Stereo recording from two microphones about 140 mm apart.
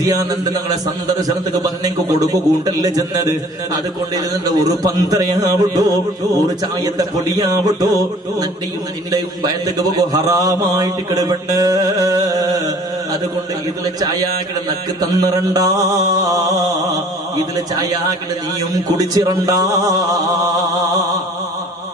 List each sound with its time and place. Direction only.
0.0 s music: 25° right (ahead or behind)
2.1 s music: 25° right (ahead or behind)
9.9 s music: 25° right (ahead or behind)
15.0 s music: 25° right (ahead or behind)
17.7 s music: 25° right (ahead or behind)